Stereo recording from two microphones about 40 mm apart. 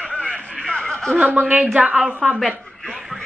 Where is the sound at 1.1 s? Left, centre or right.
Right.